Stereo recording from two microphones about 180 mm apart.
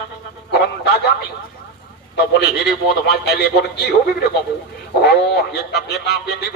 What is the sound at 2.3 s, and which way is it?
Speech, 60° left (ahead or behind).